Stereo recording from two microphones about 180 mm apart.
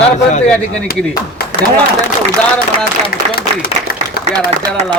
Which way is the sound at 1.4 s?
55° left (ahead or behind).